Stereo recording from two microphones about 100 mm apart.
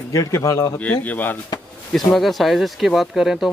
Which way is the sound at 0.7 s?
15° left (ahead or behind).